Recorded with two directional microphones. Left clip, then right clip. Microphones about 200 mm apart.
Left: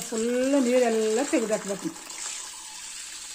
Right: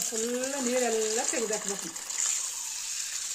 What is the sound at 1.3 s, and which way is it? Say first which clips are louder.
Speech: left 6 dB; 50° left (ahead or behind).